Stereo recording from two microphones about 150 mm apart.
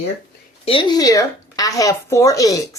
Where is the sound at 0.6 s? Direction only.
35° left (ahead or behind).